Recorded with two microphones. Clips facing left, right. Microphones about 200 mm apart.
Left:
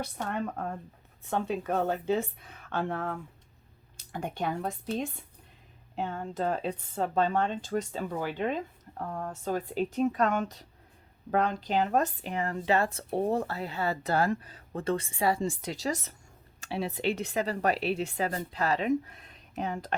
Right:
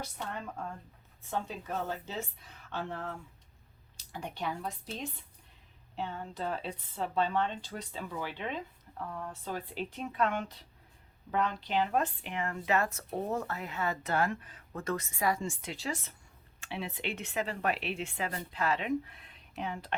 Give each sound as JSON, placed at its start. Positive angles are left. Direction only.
{"t": 0.0, "sound": "a woman's voice", "side_deg": 60}